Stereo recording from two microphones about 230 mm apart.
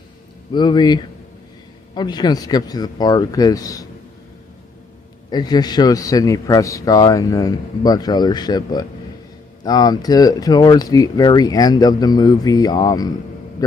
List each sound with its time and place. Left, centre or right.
0.5 s a man's voice: centre
5.3 s a man's voice: centre